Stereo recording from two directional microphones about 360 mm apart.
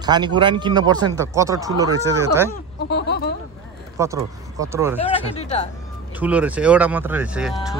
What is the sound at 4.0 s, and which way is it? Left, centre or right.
Speech, centre.